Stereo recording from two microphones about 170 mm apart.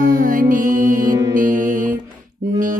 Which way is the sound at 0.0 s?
55° right (ahead or behind).